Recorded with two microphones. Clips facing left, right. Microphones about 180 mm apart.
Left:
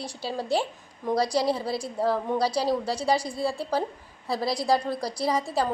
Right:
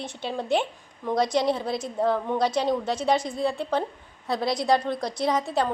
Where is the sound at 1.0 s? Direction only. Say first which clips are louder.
Right 1 dB; 15° left (ahead or behind).